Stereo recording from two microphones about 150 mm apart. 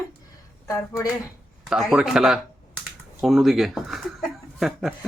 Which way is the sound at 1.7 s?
Centre (ahead or behind).